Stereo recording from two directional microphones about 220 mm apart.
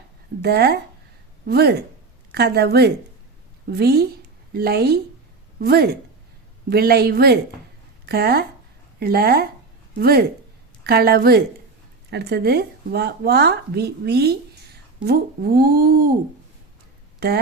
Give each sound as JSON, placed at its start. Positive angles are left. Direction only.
{"t": 0.4, "sound": "speech", "side_deg": -45}